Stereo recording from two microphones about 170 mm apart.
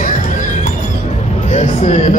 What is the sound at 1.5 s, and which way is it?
Speech, 40° left (ahead or behind).